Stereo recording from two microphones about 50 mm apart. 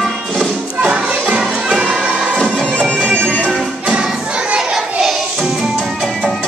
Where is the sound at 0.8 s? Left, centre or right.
Right.